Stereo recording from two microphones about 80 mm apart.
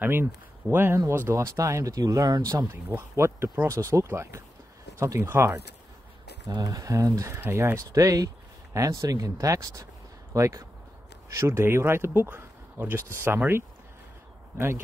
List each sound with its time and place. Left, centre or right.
0.0 s speech: right
3.0 s speech: right
6.5 s speech: right
7.9 s speech: right